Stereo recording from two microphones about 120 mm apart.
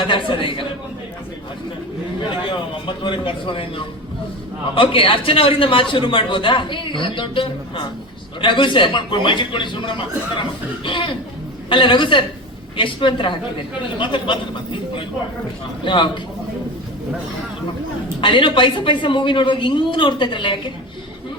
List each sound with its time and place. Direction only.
0.0 s a man's voice: 45° left (ahead or behind)
2.8 s a man's voice: 45° left (ahead or behind)
15.8 s a man's voice: 40° left (ahead or behind)
18.2 s a man's voice: 45° left (ahead or behind)